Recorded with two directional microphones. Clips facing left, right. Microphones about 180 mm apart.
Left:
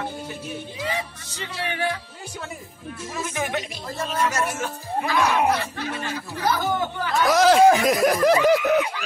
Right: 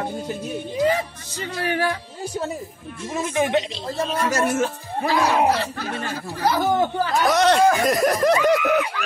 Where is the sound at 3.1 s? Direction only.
25° right (ahead or behind); by 6.2 s 40° right (ahead or behind).